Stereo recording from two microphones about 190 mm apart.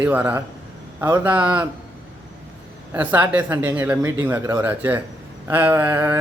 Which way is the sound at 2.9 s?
10° right (ahead or behind).